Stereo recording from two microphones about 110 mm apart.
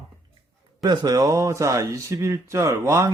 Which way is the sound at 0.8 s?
40° right (ahead or behind).